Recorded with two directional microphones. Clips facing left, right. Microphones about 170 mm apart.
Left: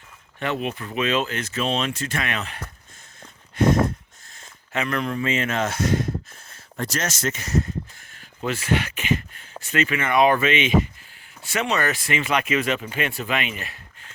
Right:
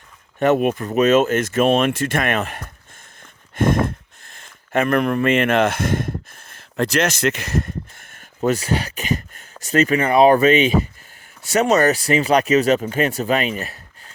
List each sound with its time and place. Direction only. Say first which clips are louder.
0.3 s speech: right 10 dB; 50° right (ahead or behind)
4.7 s speech: right 8 dB; 55° right (ahead or behind)
6.7 s speech: right 8 dB; 65° right (ahead or behind)
8.2 s speech: right 8 dB; 45° right (ahead or behind)